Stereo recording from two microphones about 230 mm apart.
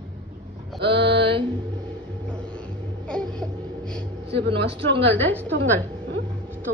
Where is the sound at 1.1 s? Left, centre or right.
Right.